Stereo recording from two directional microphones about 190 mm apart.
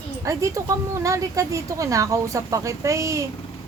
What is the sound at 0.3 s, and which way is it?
Speech, 15° right (ahead or behind).